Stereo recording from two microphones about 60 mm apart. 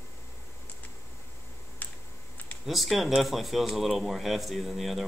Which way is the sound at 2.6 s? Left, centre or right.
Centre.